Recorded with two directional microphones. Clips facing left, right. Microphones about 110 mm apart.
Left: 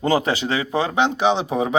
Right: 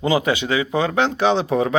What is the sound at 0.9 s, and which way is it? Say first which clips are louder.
Speech: even; 20° left (ahead or behind).